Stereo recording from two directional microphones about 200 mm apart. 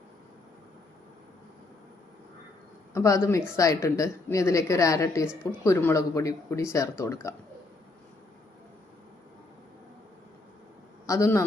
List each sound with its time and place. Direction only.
2.9 s a woman's voice: 15° left (ahead or behind)
11.0 s a man's voice: 15° left (ahead or behind)